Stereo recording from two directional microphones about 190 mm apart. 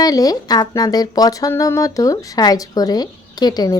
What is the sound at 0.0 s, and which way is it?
A woman's voice, 20° left (ahead or behind).